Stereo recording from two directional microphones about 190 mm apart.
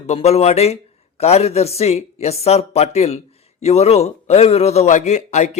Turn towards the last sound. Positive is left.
turn(degrees=40)  # may be behind; listen again after turning